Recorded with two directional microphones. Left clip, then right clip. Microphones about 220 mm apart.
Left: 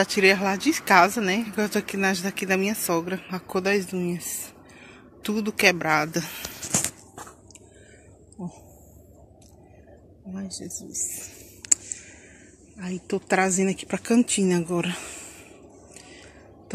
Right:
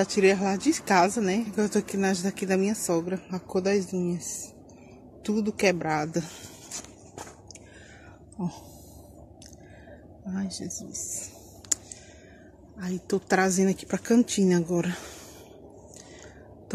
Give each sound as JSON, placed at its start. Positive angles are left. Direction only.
{"t": 0.0, "sound": "speech", "side_deg": -5}
{"t": 10.3, "sound": "speech", "side_deg": -10}
{"t": 10.6, "sound": "whispering", "side_deg": 10}
{"t": 13.0, "sound": "speech", "side_deg": 0}